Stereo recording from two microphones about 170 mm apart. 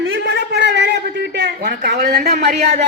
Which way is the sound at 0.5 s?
90° right.